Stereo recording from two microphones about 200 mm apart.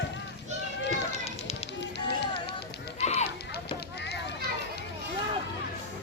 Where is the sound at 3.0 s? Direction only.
30° left (ahead or behind).